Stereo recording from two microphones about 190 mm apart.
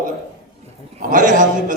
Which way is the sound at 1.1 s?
45° right (ahead or behind).